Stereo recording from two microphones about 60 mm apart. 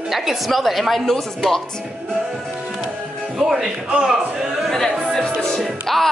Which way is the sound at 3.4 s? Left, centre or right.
Centre.